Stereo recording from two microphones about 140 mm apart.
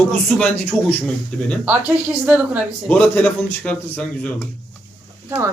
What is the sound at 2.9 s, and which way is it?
A man's voice, 10° left (ahead or behind).